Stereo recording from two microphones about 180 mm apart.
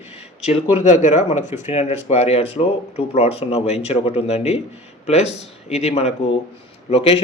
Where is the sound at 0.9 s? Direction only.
40° left (ahead or behind).